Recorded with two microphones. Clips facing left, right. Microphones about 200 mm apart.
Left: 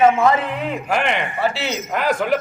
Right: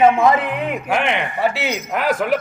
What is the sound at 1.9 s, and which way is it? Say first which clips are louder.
Speech: even; centre (ahead or behind).